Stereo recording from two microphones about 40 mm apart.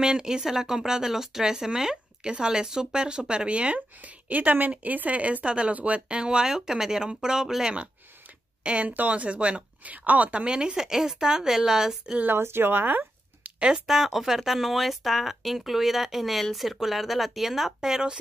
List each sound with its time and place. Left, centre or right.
0.0 s speech: centre
8.6 s speech: right
10.4 s speech: right
12.3 s speech: right
13.6 s speech: right
13.8 s speech: centre